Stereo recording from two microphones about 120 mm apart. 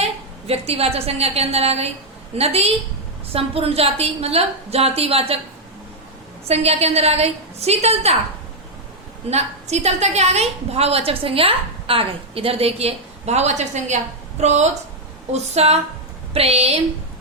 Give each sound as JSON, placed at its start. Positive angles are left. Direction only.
{"t": 0.0, "sound": "a woman's voice", "side_deg": -55}
{"t": 6.5, "sound": "a woman's voice", "side_deg": -60}
{"t": 9.3, "sound": "a woman's voice", "side_deg": -65}